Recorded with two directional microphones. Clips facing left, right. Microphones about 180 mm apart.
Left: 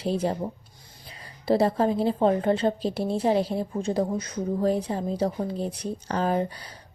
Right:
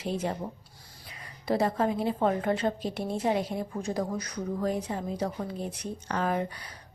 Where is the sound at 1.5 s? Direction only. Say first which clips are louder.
Left 5 dB; 30° left (ahead or behind).